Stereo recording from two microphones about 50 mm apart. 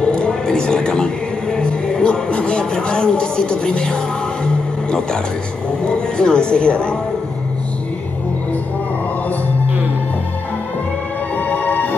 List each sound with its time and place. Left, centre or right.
0.0 s music: centre
4.5 s vehicle: centre
5.9 s speech: centre
11.3 s music: left